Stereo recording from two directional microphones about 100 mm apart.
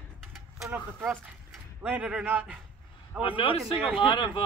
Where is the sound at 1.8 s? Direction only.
15° right (ahead or behind).